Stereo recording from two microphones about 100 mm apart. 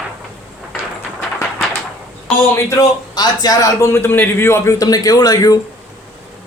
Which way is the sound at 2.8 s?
40° left (ahead or behind).